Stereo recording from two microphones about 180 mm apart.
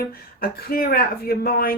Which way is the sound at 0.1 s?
55° left (ahead or behind).